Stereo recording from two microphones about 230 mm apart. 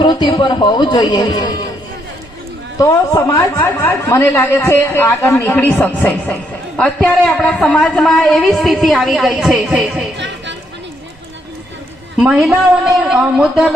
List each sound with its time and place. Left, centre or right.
0.0 s a man's voice: centre
2.7 s a woman's voice: centre
10.2 s a sound: right
12.2 s a woman's voice: centre